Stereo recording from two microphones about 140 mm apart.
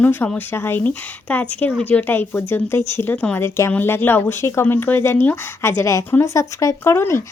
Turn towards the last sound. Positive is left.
turn(degrees=20)  # may be behind; listen again after turning